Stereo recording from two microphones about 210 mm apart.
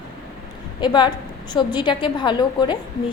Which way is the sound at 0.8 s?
20° left (ahead or behind).